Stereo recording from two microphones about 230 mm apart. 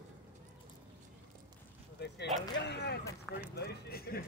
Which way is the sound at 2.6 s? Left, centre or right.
Left.